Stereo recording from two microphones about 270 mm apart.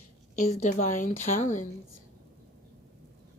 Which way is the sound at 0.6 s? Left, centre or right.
Left.